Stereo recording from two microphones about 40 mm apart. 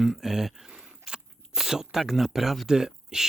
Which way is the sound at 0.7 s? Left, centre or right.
Centre.